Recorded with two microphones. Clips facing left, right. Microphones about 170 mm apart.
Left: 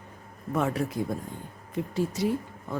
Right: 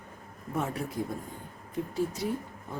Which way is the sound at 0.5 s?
80° left.